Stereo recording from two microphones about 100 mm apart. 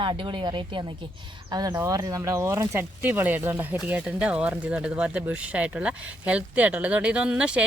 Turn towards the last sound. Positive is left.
turn(degrees=-10)  # may be behind; listen again after turning